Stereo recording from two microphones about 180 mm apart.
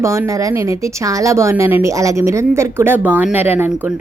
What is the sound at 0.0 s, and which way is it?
Speech, 15° right (ahead or behind).